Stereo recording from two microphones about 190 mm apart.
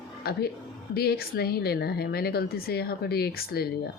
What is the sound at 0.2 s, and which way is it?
Speech, 55° left (ahead or behind).